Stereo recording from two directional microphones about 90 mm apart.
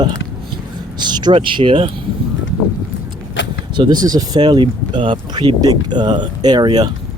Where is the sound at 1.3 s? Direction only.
70° right (ahead or behind).